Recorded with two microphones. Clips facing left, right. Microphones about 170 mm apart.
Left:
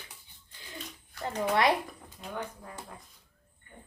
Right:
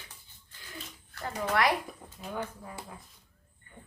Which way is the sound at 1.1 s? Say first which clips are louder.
Left 2 dB; 15° left (ahead or behind).